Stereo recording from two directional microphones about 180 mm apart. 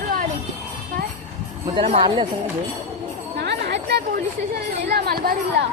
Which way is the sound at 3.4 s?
70° right (ahead or behind).